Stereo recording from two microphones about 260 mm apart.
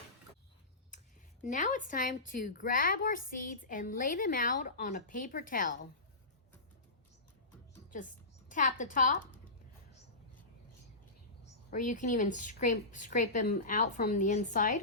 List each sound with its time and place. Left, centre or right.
1.4 s a woman's voice: left
7.9 s a woman's voice: left
11.9 s a woman's voice: left